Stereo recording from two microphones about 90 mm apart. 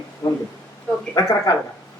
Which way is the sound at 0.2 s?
40° left (ahead or behind).